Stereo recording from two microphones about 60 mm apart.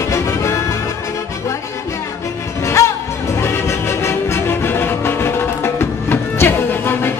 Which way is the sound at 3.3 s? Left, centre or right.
Left.